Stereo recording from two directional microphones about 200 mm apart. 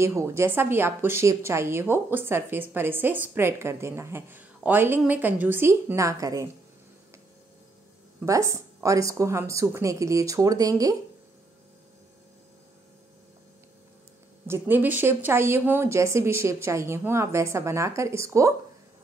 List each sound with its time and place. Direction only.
0.0 s a woman's voice: 15° right (ahead or behind)
8.3 s a woman's voice: 15° right (ahead or behind)
14.5 s a woman's voice: 10° right (ahead or behind)